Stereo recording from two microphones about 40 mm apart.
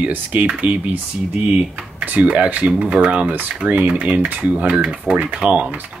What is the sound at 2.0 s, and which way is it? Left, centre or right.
Speech, right.